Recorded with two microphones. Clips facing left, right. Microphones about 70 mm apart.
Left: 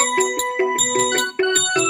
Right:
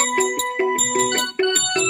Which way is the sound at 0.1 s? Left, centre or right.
Centre.